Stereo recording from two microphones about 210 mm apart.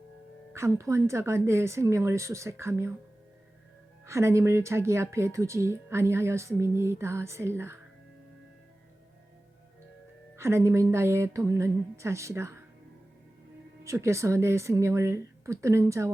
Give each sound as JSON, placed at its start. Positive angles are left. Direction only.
{"t": 0.5, "sound": "speech", "side_deg": -10}
{"t": 4.0, "sound": "speech", "side_deg": -10}
{"t": 10.3, "sound": "speech", "side_deg": -10}
{"t": 13.8, "sound": "speech", "side_deg": -15}